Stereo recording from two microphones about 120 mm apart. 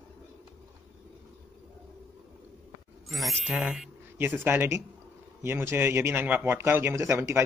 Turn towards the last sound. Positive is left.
turn(degrees=-20)  # may be behind; listen again after turning